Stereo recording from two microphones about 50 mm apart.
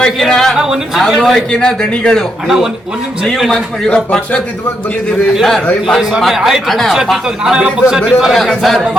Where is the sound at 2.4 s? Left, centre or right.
Centre.